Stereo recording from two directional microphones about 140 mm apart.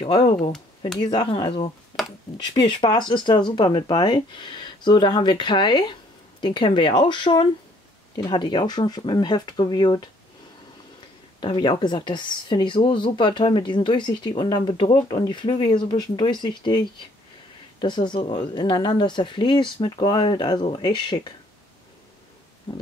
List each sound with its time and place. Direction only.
0.0 s speech: 30° left (ahead or behind)
11.4 s speech: 35° left (ahead or behind)